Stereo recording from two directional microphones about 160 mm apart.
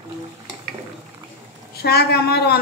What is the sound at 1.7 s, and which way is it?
Speech, 85° left.